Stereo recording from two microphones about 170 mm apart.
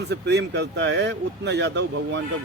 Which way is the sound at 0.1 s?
85° right.